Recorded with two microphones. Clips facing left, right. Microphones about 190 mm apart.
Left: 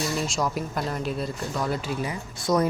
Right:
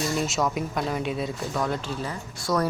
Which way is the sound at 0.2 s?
Centre (ahead or behind).